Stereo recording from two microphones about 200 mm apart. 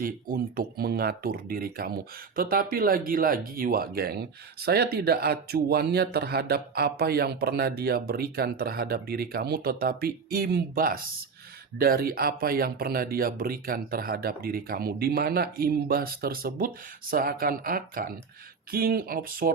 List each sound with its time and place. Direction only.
0.0 s speech: 45° right (ahead or behind)